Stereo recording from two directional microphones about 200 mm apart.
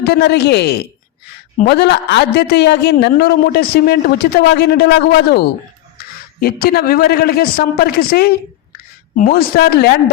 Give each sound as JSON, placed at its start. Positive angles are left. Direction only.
{"t": 0.0, "sound": "a woman's voice", "side_deg": 55}
{"t": 6.0, "sound": "a sound", "side_deg": 50}
{"t": 6.4, "sound": "a woman's voice", "side_deg": 50}